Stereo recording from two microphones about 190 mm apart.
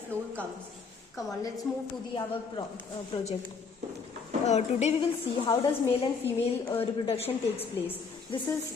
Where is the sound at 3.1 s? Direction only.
30° left (ahead or behind).